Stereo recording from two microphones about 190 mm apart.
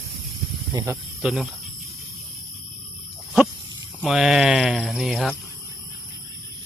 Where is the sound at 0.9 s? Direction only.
5° right (ahead or behind).